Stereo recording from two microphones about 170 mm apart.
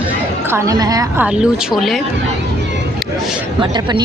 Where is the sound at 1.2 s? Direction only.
5° right (ahead or behind).